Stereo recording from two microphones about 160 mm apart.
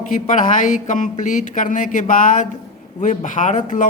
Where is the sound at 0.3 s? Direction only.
55° left (ahead or behind).